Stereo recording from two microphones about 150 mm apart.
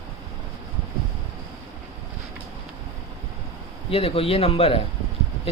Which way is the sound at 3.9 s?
40° left (ahead or behind).